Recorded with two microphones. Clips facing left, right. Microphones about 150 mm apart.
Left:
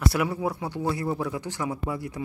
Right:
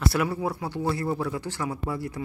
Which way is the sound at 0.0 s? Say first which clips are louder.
Even; 15° left (ahead or behind).